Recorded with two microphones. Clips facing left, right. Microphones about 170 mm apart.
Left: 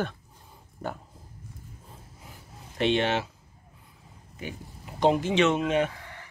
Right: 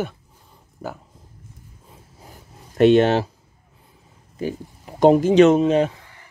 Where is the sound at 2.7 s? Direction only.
45° right (ahead or behind).